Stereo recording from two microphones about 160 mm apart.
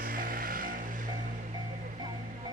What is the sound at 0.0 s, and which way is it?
Music, 60° right (ahead or behind).